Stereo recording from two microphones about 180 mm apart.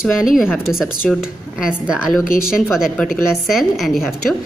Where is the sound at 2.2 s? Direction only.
50° left (ahead or behind).